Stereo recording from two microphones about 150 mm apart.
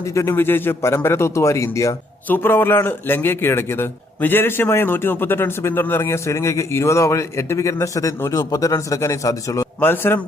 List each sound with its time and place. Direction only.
0.0 s a man's voice: 20° left (ahead or behind)